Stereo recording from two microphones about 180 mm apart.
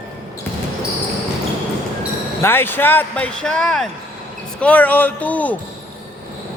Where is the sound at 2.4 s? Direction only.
10° left (ahead or behind).